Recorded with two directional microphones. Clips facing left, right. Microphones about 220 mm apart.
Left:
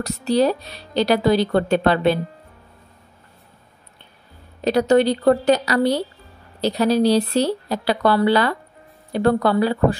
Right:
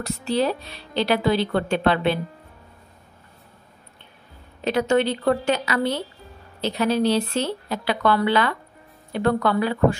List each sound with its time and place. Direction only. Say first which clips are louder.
0.0 s a woman's voice: left 5 dB; 40° left (ahead or behind)
4.6 s a woman's voice: left 4 dB; 40° left (ahead or behind)